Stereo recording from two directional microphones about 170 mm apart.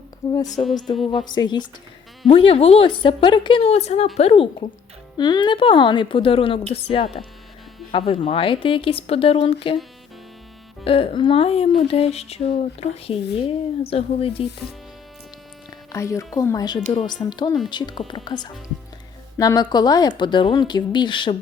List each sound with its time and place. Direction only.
0.6 s speech: 20° left (ahead or behind)
10.8 s speech: 35° left (ahead or behind)
15.9 s speech: 15° left (ahead or behind)